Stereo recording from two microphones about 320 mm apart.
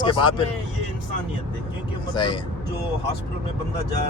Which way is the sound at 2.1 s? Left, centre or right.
Centre.